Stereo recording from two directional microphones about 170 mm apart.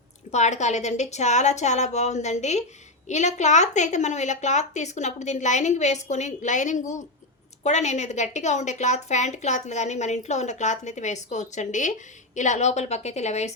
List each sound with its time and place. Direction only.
0.3 s a woman's voice: 40° left (ahead or behind)